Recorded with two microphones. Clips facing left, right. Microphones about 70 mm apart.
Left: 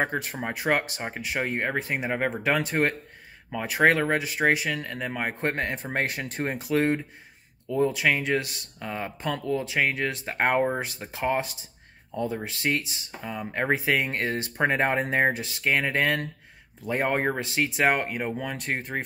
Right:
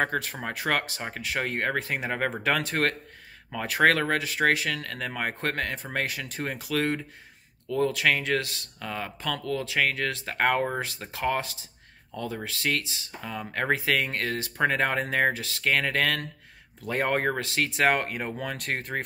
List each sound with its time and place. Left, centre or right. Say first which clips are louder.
0.0 s speech: even; centre
5.5 s speech: left 2 dB; left
10.6 s speech: left 3 dB; centre